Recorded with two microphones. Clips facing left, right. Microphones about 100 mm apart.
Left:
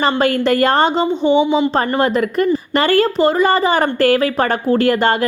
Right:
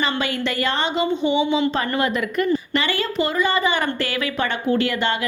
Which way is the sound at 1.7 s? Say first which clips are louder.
Left 6 dB; 40° left (ahead or behind).